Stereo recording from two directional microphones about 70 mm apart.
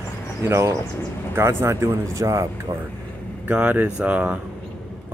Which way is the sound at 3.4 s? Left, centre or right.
Right.